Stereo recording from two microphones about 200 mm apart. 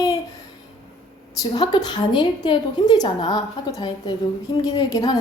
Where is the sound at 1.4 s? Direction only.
20° left (ahead or behind).